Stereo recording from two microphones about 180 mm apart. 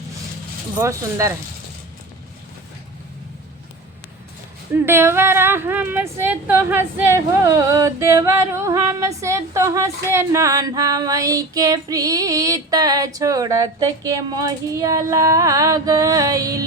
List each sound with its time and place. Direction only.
0.8 s speech: 15° right (ahead or behind)
4.7 s speech: 15° right (ahead or behind)